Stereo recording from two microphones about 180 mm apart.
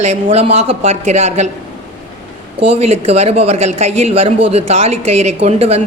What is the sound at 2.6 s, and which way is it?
Speech, 35° right (ahead or behind).